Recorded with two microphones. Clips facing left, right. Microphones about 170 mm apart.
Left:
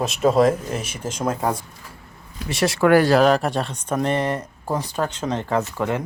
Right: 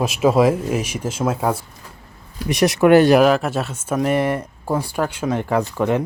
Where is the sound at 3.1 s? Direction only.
5° right (ahead or behind).